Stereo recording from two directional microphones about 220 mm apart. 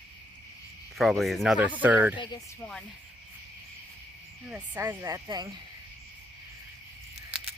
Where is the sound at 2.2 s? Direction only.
20° left (ahead or behind).